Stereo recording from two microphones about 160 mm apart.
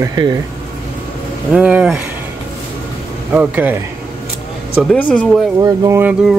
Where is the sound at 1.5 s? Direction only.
5° right (ahead or behind).